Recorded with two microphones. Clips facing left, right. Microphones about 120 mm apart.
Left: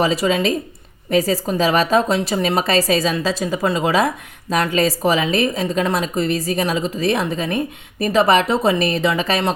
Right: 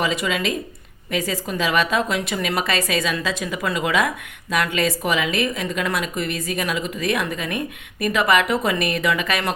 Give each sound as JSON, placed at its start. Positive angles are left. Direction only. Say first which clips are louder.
{"t": 0.0, "sound": "a woman's voice", "louder": "left 5 dB", "side_deg": 35}